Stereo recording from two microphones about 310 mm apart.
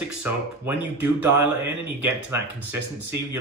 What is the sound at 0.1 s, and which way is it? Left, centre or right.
A man's voice, centre.